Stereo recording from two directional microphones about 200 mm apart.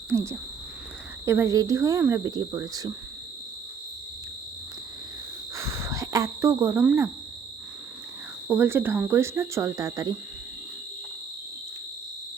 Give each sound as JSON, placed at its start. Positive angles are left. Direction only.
{"t": 0.1, "sound": "speech", "side_deg": -15}
{"t": 5.5, "sound": "a sound", "side_deg": -15}
{"t": 8.4, "sound": "speech", "side_deg": -10}